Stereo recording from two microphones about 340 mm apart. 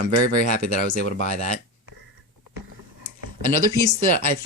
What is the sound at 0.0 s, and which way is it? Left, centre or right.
Speech, right.